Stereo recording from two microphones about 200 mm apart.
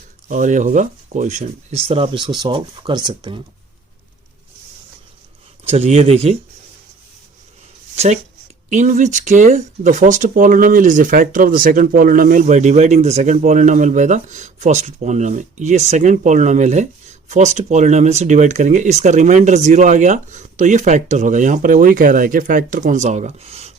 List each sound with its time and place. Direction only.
0.3 s speech: 40° right (ahead or behind); by 3.4 s 25° right (ahead or behind)
5.6 s speech: 30° right (ahead or behind)
7.9 s speech: 35° right (ahead or behind)